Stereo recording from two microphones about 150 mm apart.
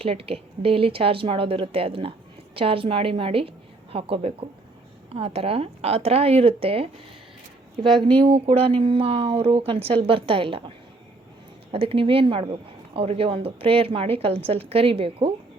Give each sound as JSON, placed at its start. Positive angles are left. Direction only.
{"t": 0.0, "sound": "speech", "side_deg": -40}
{"t": 7.9, "sound": "speech", "side_deg": 5}
{"t": 8.2, "sound": "speech", "side_deg": -40}
{"t": 11.7, "sound": "speech", "side_deg": -40}